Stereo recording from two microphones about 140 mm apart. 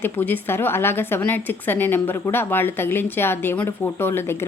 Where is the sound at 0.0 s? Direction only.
15° left (ahead or behind).